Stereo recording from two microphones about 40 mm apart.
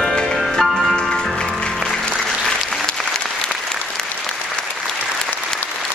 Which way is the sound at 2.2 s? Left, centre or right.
Centre.